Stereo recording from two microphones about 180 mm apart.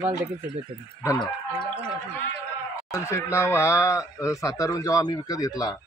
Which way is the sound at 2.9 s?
15° left (ahead or behind).